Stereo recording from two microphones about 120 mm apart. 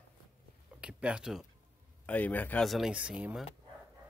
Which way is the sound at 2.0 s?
15° left (ahead or behind).